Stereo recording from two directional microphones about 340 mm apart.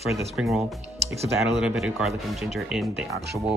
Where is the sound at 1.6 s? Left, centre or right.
Centre.